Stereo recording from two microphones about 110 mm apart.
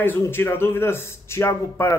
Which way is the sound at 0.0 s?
20° left (ahead or behind).